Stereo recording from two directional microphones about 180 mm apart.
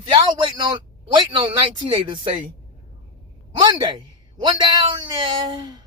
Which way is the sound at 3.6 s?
25° right (ahead or behind).